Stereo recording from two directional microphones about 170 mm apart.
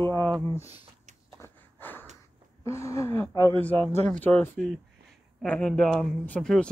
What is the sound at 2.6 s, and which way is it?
Speech, 15° left (ahead or behind).